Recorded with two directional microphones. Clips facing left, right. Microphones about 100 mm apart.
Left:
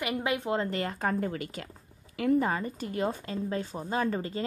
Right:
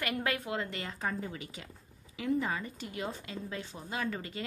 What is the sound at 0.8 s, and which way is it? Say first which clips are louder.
Speech: left 7 dB; 55° left (ahead or behind).